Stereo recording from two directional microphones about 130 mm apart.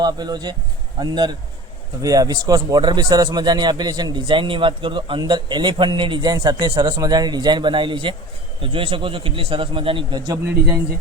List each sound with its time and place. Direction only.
0.0 s a man's voice: 35° right (ahead or behind)